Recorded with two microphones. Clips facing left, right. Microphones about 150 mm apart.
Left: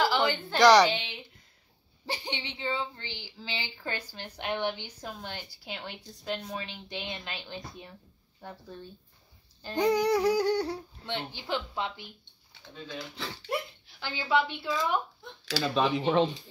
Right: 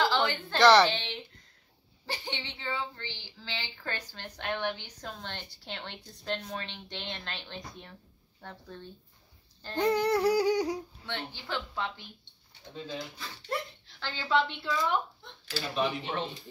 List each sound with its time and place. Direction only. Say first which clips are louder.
0.0 s a woman's voice: left 1 dB; 15° left (ahead or behind)
10.2 s humming: even; 10° right (ahead or behind)
11.1 s a woman's voice: left 5 dB; 15° left (ahead or behind)
13.5 s speech: left 1 dB; 10° left (ahead or behind)
15.4 s speech: left 4 dB; 90° left